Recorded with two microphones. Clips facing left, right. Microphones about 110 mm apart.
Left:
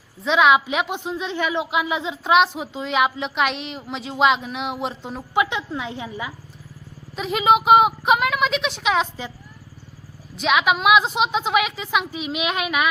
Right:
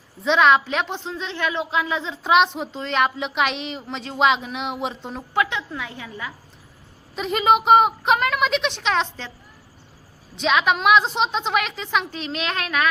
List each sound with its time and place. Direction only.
0.2 s a woman's voice: 5° left (ahead or behind)
2.2 s a woman's voice: centre (ahead or behind)
5.3 s a woman's voice: 15° left (ahead or behind)
7.2 s a woman's voice: centre (ahead or behind)
10.3 s a woman's voice: 5° left (ahead or behind)